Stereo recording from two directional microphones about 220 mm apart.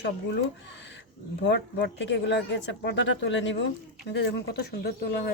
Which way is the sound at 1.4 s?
50° left (ahead or behind).